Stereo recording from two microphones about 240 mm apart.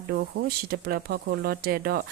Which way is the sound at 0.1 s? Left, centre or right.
Right.